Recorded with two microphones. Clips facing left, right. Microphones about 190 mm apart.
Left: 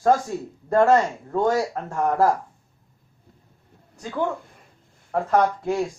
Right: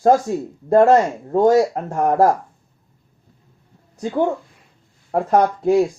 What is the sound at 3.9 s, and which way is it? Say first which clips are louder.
Speech: right 6 dB; 35° right (ahead or behind).